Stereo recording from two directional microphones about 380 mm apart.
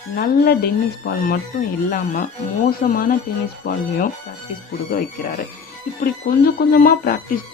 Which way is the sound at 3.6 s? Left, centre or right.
Left.